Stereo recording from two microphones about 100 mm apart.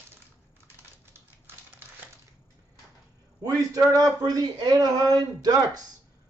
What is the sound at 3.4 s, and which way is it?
Speech, 35° right (ahead or behind).